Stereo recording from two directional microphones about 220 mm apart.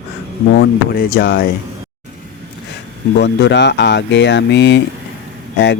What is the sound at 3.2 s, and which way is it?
Speech, 50° left (ahead or behind).